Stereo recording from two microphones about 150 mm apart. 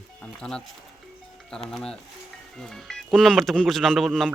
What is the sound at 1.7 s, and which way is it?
Speech, 5° left (ahead or behind).